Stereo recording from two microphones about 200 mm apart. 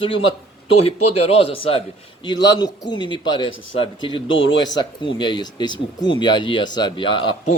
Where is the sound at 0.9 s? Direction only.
30° left (ahead or behind).